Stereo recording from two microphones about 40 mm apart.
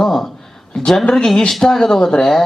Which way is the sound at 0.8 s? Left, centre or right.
Centre.